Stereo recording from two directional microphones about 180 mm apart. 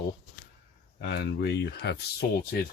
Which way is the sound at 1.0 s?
65° left (ahead or behind).